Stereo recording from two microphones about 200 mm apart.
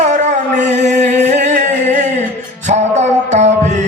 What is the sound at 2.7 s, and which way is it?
Music, 35° right (ahead or behind).